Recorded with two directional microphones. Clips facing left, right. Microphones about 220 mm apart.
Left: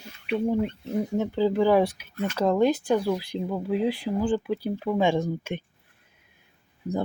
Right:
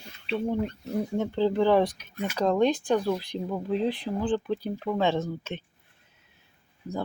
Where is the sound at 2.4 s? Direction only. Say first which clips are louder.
Left 1 dB; 5° left (ahead or behind).